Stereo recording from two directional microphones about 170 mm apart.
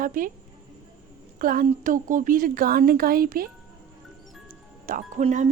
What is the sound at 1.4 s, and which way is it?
Speech, 55° right (ahead or behind).